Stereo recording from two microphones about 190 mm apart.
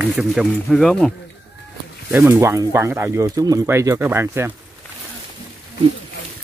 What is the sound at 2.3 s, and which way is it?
Speech, 15° right (ahead or behind).